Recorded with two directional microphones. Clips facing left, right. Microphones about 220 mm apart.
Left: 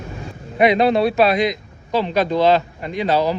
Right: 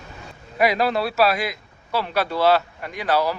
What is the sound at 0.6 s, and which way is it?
A man's voice, 25° left (ahead or behind).